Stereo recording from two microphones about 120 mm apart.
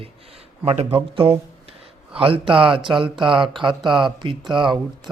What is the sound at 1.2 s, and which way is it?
Speech, 50° right (ahead or behind).